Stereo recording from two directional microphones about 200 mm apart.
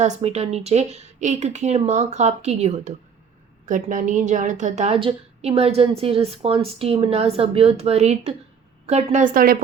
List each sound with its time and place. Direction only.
0.0 s a woman's voice: 30° right (ahead or behind)